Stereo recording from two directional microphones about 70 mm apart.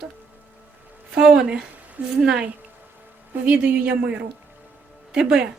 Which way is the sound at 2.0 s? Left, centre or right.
Right.